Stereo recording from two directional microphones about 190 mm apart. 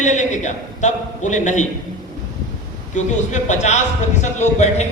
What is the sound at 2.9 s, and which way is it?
A man's voice, 40° left (ahead or behind).